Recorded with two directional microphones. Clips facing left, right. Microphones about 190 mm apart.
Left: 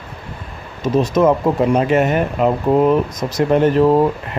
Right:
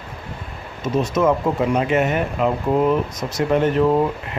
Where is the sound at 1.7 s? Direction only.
40° left (ahead or behind).